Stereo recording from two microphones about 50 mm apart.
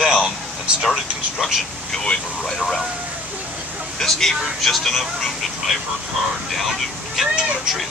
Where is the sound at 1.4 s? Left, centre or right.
Centre.